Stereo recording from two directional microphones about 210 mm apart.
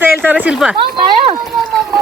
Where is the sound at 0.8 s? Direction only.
20° right (ahead or behind).